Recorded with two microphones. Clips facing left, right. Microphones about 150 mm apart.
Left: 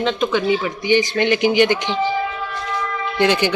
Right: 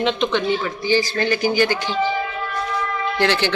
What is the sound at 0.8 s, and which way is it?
Speech, 20° left (ahead or behind).